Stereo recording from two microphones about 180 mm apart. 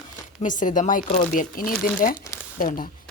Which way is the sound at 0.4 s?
45° left (ahead or behind).